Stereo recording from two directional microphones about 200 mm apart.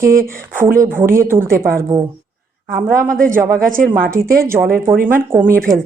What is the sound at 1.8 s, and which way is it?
Speech, 20° right (ahead or behind).